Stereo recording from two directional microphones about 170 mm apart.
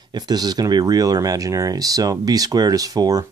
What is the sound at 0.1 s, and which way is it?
Speech, 25° right (ahead or behind).